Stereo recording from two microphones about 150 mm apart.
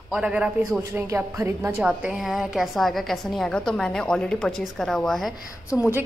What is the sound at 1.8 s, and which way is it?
A woman's voice, 5° right (ahead or behind).